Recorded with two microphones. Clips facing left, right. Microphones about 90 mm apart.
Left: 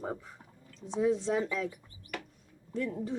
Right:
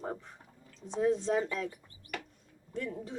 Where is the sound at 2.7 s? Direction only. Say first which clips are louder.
Left 4 dB; centre (ahead or behind).